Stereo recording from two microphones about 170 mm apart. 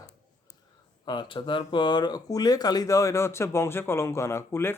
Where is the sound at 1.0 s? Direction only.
25° left (ahead or behind).